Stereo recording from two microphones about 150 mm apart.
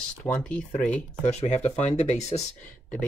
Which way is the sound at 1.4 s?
50° left (ahead or behind).